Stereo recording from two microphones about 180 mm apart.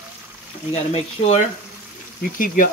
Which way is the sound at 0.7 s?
35° left (ahead or behind).